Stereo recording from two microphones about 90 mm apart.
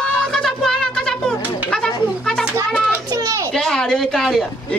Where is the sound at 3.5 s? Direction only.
5° left (ahead or behind).